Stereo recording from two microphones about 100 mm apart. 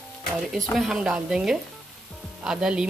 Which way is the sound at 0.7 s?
5° right (ahead or behind).